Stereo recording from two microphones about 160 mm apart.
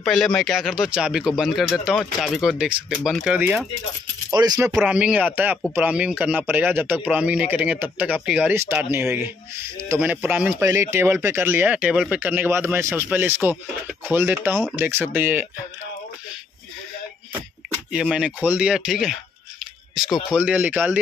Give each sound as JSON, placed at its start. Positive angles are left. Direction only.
{"t": 0.0, "sound": "speech", "side_deg": 5}
{"t": 4.3, "sound": "coin", "side_deg": -25}
{"t": 4.7, "sound": "speech", "side_deg": -5}
{"t": 17.9, "sound": "speech", "side_deg": -5}
{"t": 20.2, "sound": "speech", "side_deg": -5}